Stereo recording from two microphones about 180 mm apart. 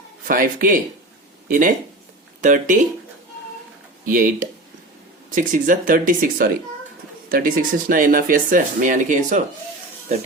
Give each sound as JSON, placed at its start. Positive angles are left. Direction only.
{"t": 0.3, "sound": "speech", "side_deg": -50}
{"t": 4.0, "sound": "speech", "side_deg": -50}